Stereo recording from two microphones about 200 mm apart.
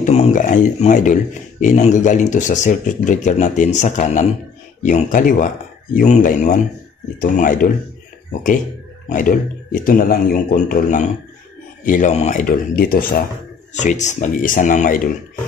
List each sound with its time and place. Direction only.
0.0 s speech: 35° left (ahead or behind)
9.1 s speech: 40° left (ahead or behind)
13.7 s speech: 35° left (ahead or behind)